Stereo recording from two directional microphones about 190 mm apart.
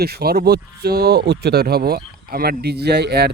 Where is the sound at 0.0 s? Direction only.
55° right (ahead or behind).